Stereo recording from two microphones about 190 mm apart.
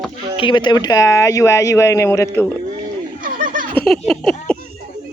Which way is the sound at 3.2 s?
45° right (ahead or behind).